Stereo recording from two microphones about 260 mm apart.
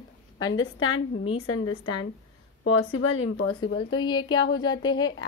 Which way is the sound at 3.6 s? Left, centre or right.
Left.